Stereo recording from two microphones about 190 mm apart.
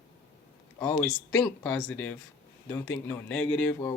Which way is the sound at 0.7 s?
10° left (ahead or behind).